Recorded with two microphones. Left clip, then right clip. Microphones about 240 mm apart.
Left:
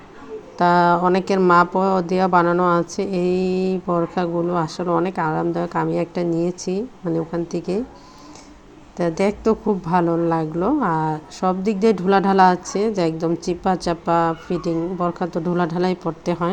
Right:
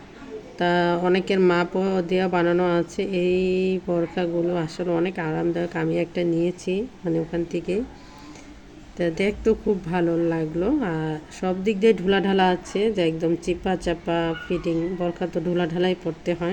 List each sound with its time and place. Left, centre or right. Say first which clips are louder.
0.6 s a woman's voice: left 6 dB; centre
9.0 s a woman's voice: left 3 dB; centre